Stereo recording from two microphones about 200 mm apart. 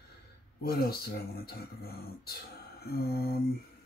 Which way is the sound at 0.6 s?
50° left (ahead or behind).